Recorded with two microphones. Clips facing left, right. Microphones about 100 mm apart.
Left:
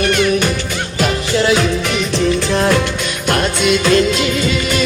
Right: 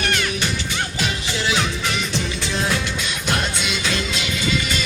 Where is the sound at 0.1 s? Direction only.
55° left (ahead or behind).